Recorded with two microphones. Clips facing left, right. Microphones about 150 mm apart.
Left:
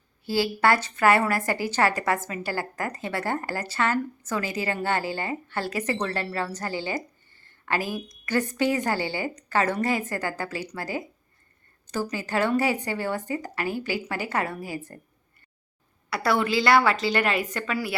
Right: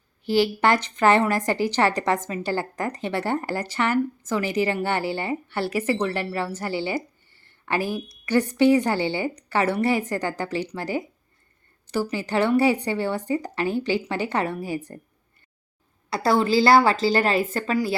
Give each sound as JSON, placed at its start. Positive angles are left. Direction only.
{"t": 0.3, "sound": "a woman's voice", "side_deg": -20}
{"t": 7.8, "sound": "a woman's voice", "side_deg": 15}
{"t": 8.3, "sound": "a woman's voice", "side_deg": -15}